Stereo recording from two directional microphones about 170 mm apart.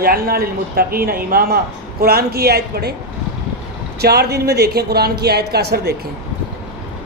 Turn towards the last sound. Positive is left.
turn(degrees=-70)  # may be behind; listen again after turning